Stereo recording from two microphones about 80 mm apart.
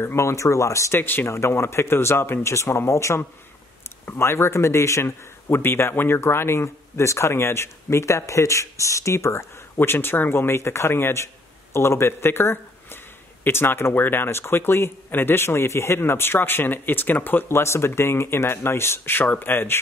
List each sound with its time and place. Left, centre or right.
0.0 s a man's voice: left
0.9 s a man's voice: left
9.8 s speech: left